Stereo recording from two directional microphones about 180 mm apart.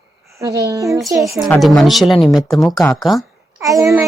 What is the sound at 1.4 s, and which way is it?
A child's voice, centre (ahead or behind).